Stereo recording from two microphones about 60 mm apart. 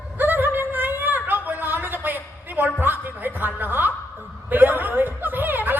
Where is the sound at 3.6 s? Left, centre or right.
Right.